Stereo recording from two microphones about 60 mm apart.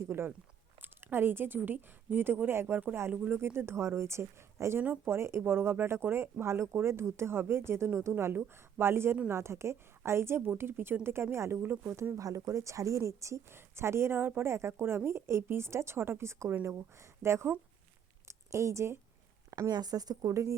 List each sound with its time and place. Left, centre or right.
0.8 s speech: right
3.1 s speech: right
3.3 s a woman's voice: right
12.1 s speech: right
13.5 s a woman's voice: right
19.5 s speech: right